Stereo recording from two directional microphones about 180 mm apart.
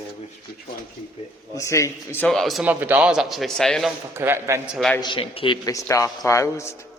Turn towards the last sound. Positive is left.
turn(degrees=15)  # may be behind; listen again after turning